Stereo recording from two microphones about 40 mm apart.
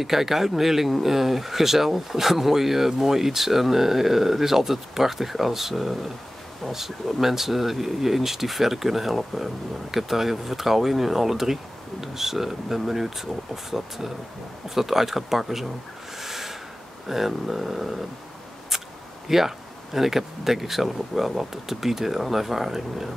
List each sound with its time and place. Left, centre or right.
0.0 s speech: centre
16.2 s a sound: centre
17.1 s speech: centre
19.2 s speech: centre